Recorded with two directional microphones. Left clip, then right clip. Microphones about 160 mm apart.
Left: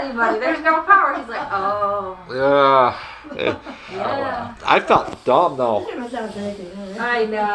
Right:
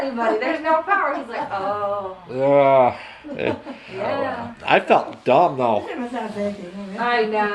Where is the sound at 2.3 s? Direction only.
5° right (ahead or behind).